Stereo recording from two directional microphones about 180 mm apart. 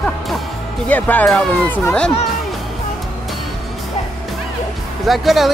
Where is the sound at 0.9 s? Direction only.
10° left (ahead or behind).